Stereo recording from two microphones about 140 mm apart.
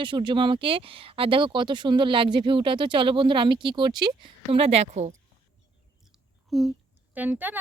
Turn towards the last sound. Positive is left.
turn(degrees=-10)  # may be behind; listen again after turning